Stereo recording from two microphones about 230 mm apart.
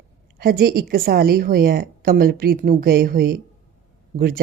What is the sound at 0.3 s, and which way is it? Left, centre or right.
Speech, right.